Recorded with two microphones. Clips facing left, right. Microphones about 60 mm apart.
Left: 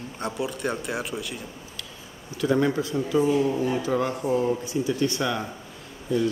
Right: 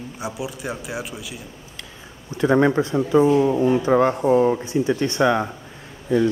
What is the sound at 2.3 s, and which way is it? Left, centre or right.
Speech, right.